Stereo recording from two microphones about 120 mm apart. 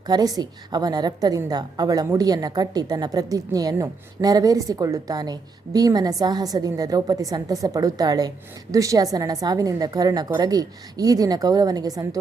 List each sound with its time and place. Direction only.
0.1 s a woman's voice: 35° right (ahead or behind)